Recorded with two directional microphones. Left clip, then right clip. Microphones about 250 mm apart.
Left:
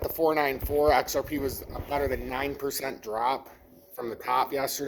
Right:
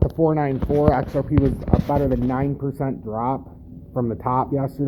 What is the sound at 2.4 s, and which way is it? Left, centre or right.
Speech, centre.